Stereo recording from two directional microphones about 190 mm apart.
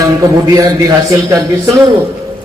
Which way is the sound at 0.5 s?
20° right (ahead or behind).